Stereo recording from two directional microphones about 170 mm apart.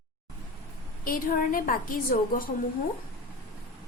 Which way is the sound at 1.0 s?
55° left (ahead or behind).